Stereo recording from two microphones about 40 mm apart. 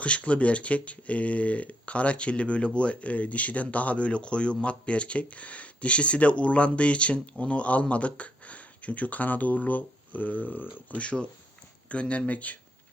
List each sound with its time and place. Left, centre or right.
0.0 s speech: left
11.0 s speech: left